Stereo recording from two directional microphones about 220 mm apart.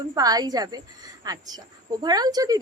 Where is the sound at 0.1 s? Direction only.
15° right (ahead or behind).